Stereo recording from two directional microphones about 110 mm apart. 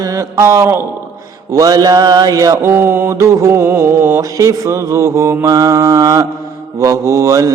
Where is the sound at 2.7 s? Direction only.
20° right (ahead or behind).